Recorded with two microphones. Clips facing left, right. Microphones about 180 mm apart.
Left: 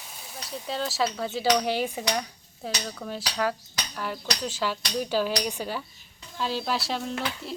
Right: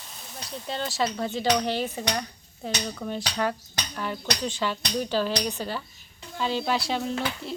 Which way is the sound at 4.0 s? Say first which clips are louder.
Right 2 dB; centre (ahead or behind).